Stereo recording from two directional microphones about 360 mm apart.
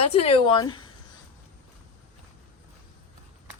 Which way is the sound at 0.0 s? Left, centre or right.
Centre.